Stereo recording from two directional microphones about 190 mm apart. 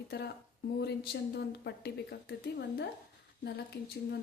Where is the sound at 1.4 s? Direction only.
60° left (ahead or behind).